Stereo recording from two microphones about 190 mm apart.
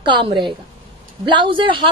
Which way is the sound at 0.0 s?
25° right (ahead or behind).